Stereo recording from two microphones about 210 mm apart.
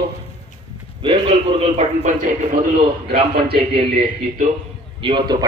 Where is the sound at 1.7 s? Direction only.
35° right (ahead or behind).